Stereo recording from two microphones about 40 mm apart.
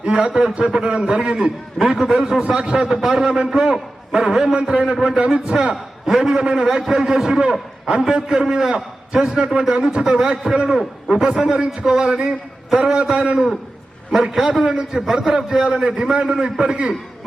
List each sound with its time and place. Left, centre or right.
0.0 s a man's voice: right
5.7 s a man's voice: centre; by 13.3 s right
14.1 s a man's voice: centre